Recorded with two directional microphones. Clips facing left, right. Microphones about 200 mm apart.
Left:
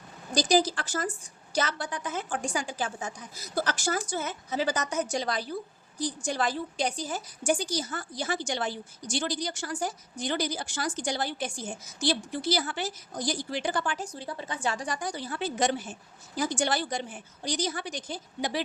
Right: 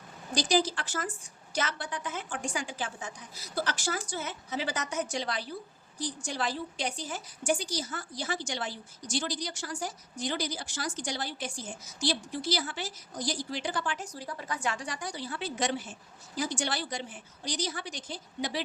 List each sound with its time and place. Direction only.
0.3 s a woman's voice: 40° left (ahead or behind)
14.0 s a woman's voice: 25° left (ahead or behind); by 18.6 s 50° left (ahead or behind)